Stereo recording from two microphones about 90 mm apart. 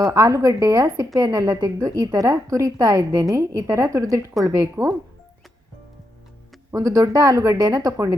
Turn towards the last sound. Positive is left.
turn(degrees=-45)  # may be behind; listen again after turning